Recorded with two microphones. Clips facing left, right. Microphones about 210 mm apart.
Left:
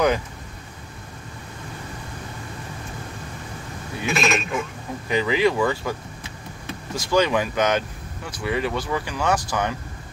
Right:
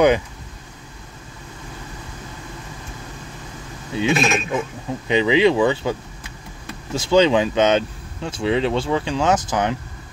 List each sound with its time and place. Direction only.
4.0 s speech: 25° right (ahead or behind)
7.0 s speech: 25° right (ahead or behind)